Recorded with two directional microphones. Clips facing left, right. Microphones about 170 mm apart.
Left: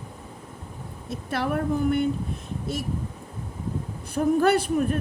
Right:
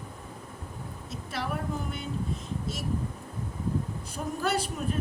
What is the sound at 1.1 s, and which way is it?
Speech, 60° left (ahead or behind).